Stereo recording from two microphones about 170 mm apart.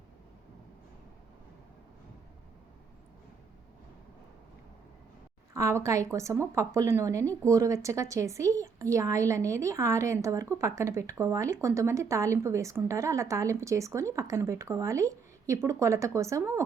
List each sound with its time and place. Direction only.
5.5 s a woman's voice: 20° right (ahead or behind)